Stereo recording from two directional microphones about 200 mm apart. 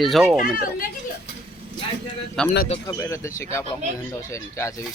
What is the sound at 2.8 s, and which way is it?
Speech, 15° left (ahead or behind).